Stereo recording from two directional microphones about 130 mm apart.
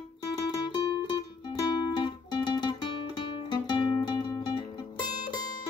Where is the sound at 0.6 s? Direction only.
35° left (ahead or behind).